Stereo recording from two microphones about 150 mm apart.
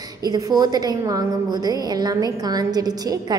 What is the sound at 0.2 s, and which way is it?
A woman's voice, 25° right (ahead or behind).